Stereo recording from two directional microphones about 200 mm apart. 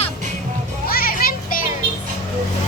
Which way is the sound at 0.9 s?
50° left (ahead or behind).